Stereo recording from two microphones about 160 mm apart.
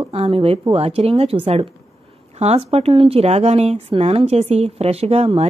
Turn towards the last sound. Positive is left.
turn(degrees=-40)  # may be behind; listen again after turning